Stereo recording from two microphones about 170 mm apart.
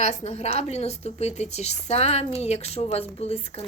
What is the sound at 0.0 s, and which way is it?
A woman's voice, 40° left (ahead or behind).